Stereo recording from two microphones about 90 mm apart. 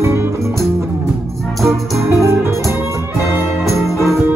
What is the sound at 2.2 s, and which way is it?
Music, 30° right (ahead or behind).